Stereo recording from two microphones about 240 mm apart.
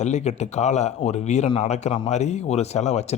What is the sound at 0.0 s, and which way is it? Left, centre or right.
Speech, left.